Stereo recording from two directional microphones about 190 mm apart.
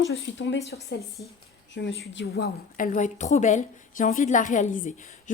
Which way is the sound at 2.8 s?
40° left (ahead or behind).